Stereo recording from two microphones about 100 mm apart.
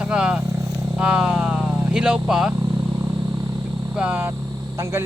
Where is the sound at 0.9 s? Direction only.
10° right (ahead or behind).